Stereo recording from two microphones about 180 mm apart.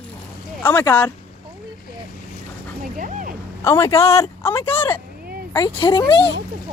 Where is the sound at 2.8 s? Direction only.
45° right (ahead or behind).